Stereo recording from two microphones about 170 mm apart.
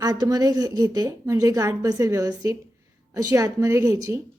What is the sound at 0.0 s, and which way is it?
A woman's voice, 20° right (ahead or behind).